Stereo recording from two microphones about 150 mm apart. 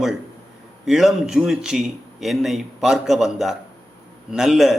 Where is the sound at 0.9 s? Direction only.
Centre (ahead or behind).